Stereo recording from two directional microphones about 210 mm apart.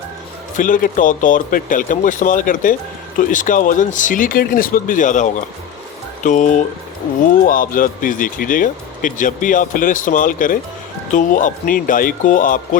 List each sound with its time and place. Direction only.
0.5 s speech: 40° left (ahead or behind)